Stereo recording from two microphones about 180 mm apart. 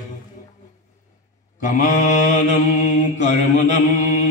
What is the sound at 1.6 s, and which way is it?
Mantra, 45° left (ahead or behind).